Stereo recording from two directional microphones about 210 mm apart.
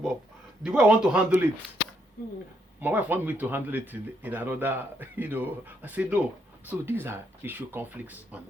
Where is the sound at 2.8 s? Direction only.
10° right (ahead or behind).